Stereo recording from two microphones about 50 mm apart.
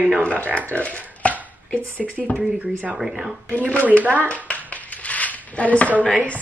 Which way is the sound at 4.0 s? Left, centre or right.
Right.